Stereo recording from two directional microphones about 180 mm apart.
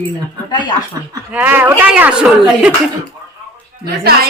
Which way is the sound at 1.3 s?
10° right (ahead or behind).